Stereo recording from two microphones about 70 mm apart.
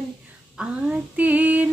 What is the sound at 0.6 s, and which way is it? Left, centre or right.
Female singing, centre.